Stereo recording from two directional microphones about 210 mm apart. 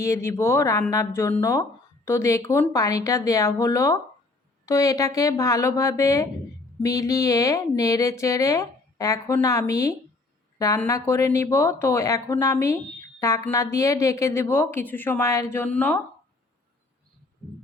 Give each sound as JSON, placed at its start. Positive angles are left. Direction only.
{"t": 0.0, "sound": "speech", "side_deg": 15}